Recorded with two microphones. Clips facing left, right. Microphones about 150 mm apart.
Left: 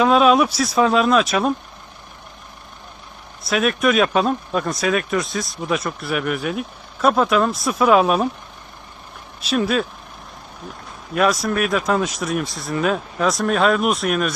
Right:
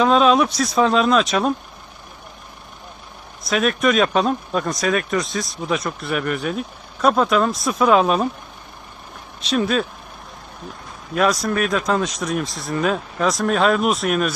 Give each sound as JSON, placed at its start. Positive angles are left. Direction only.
{"t": 0.0, "sound": "speech", "side_deg": 5}
{"t": 3.4, "sound": "speech", "side_deg": 0}
{"t": 9.4, "sound": "speech", "side_deg": 5}
{"t": 11.1, "sound": "speech", "side_deg": 0}